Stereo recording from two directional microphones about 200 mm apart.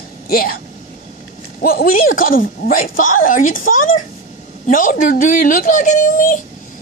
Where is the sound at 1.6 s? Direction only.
45° left (ahead or behind).